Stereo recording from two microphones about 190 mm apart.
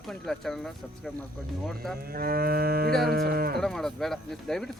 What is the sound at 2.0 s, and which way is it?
Livestock, 50° right (ahead or behind).